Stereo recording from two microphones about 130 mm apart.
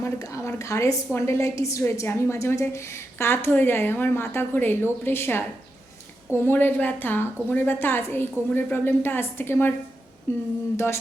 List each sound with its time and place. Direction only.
0.0 s a woman's voice: 25° left (ahead or behind)
6.4 s a woman's voice: 15° left (ahead or behind)